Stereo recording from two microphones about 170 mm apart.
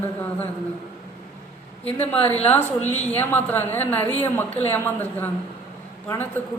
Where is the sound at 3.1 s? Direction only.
10° left (ahead or behind).